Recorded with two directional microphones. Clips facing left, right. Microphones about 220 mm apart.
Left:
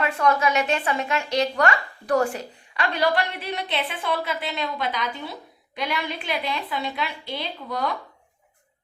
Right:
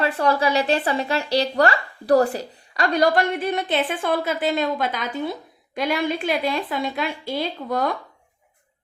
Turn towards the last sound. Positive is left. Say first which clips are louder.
# right 4 dB
turn(degrees=-50)  # may be behind; listen again after turning